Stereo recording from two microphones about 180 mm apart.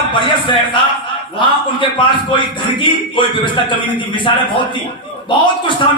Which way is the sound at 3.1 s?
25° left (ahead or behind).